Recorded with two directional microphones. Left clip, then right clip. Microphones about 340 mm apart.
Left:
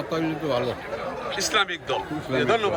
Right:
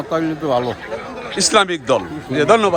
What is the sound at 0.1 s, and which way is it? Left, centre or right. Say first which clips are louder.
A man's voice: right 8 dB; centre.